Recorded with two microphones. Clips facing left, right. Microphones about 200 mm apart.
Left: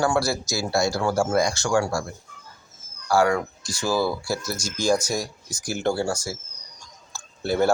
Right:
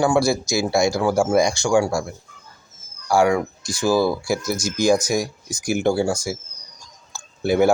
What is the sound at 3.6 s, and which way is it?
Speech, 10° left (ahead or behind).